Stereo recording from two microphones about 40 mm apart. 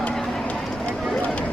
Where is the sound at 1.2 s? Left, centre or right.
Left.